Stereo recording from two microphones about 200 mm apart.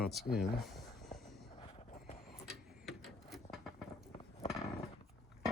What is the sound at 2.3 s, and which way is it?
Vehicle, centre (ahead or behind).